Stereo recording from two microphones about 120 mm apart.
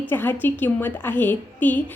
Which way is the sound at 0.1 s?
15° left (ahead or behind).